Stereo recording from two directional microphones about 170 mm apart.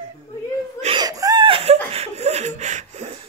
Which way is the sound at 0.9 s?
20° right (ahead or behind).